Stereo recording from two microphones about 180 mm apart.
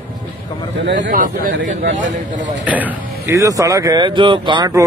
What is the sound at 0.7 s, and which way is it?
Speech, 80° right.